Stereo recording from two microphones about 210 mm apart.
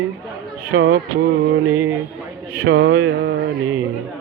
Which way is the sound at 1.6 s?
10° right (ahead or behind).